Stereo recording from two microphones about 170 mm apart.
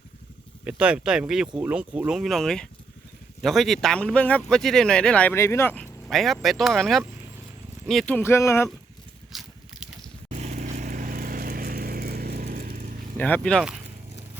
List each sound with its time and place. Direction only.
0.6 s speech: 5° right (ahead or behind); by 8.7 s 15° left (ahead or behind)
9.3 s a sound: centre (ahead or behind)
10.2 s vehicle: 40° right (ahead or behind)
13.1 s speech: 10° left (ahead or behind)